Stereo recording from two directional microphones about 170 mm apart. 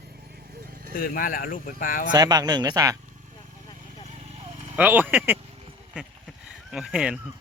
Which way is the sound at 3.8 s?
40° right (ahead or behind).